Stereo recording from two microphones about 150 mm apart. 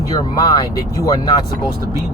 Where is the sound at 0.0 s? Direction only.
25° left (ahead or behind).